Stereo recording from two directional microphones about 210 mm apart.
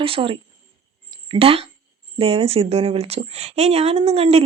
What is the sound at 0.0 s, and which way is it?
Speech, 25° right (ahead or behind).